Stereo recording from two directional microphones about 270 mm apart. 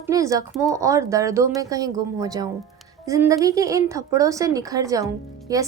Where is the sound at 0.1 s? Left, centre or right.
Centre.